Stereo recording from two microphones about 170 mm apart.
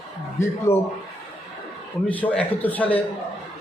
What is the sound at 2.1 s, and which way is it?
Speech, 10° left (ahead or behind).